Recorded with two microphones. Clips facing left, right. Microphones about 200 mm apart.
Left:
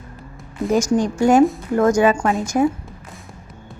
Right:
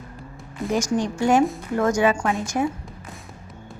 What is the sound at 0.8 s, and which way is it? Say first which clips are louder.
Speech: left 5 dB; 45° left (ahead or behind).